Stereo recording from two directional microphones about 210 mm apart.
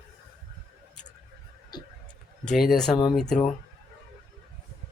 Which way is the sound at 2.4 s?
Centre (ahead or behind).